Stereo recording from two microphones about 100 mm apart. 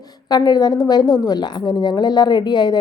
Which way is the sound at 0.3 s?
40° left (ahead or behind).